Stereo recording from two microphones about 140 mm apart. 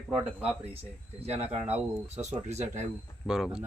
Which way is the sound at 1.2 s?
50° right (ahead or behind).